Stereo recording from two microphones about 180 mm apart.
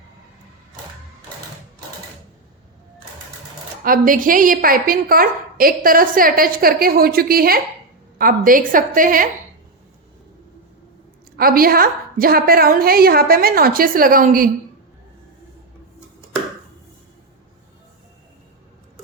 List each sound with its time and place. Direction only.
3.8 s a woman's voice: 50° right (ahead or behind)
11.3 s a woman's voice: 55° right (ahead or behind)